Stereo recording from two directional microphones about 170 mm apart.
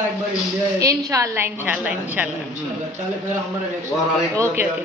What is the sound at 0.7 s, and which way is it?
A woman's voice, 20° right (ahead or behind).